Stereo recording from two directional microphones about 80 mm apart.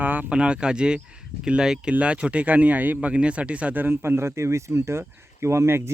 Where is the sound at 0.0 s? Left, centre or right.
Centre.